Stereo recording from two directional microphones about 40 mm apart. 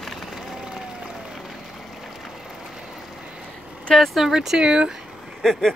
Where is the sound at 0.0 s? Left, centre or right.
Centre.